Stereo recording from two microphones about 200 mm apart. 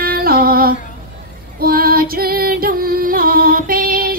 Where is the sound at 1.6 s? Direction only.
45° right (ahead or behind).